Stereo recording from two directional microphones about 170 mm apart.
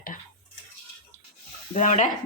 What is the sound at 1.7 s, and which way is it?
Speech, 45° left (ahead or behind).